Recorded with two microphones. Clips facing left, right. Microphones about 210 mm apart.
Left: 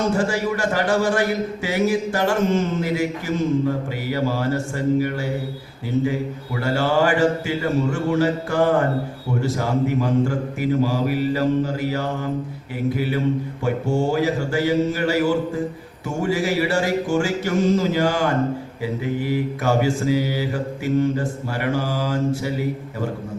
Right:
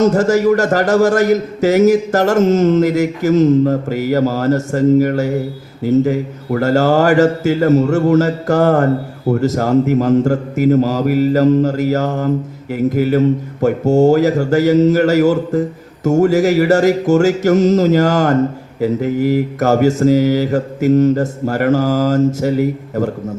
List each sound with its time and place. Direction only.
0.0 s a man's voice: 40° right (ahead or behind)